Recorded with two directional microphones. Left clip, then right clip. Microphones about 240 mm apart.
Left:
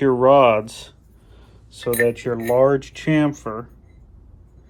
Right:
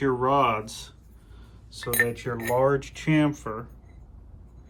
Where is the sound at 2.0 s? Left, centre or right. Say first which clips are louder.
Left 8 dB; left.